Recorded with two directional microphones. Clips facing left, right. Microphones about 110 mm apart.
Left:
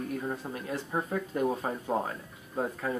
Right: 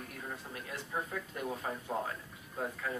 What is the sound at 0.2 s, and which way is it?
Speech, 35° left (ahead or behind).